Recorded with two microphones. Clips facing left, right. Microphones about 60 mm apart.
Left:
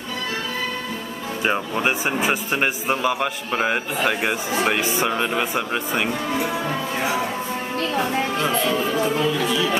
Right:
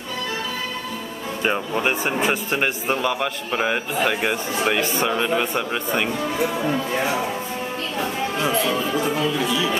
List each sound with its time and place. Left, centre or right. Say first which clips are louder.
1.4 s speech: even; centre
8.9 s speech: left 1 dB; centre